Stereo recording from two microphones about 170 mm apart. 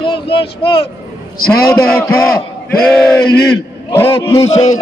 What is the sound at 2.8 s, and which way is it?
A man's voice, 5° left (ahead or behind).